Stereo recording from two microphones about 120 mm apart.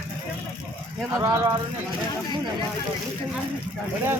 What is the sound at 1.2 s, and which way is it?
Speech, 30° right (ahead or behind).